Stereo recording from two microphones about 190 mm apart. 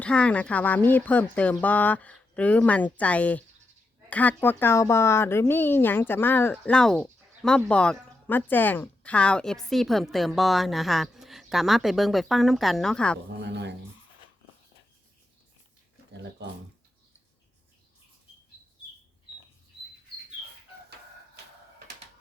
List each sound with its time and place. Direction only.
0.0 s speech: 5° left (ahead or behind)
13.4 s speech: 65° right (ahead or behind)